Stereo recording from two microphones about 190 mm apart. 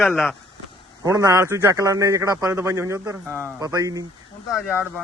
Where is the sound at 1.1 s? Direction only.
20° right (ahead or behind).